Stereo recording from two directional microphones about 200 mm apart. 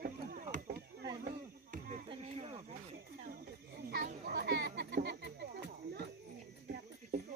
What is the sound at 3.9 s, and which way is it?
Children playing, 50° right (ahead or behind).